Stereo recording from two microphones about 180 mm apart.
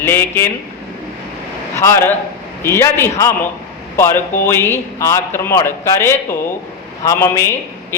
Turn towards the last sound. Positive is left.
turn(degrees=15)  # may be behind; listen again after turning